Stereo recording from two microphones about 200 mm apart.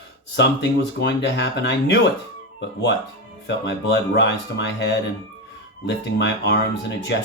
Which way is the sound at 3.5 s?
60° left (ahead or behind).